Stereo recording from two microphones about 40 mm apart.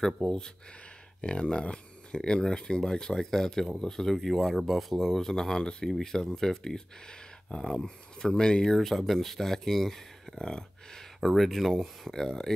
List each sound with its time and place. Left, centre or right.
0.2 s speech: centre
1.2 s speech: left
5.6 s speech: left
5.9 s speech: centre
8.6 s speech: centre
11.1 s speech: centre